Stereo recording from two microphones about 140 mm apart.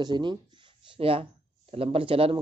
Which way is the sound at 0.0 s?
35° right (ahead or behind).